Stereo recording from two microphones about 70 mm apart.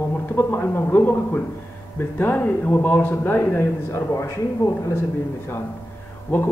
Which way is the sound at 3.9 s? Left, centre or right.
Left.